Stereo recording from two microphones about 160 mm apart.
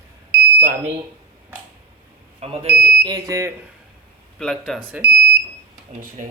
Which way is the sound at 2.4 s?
40° right (ahead or behind).